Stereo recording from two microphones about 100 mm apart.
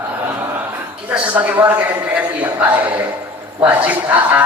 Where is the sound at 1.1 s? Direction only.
15° right (ahead or behind).